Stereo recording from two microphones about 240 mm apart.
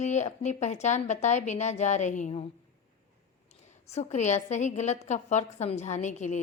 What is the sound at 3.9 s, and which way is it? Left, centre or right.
A woman's voice, left.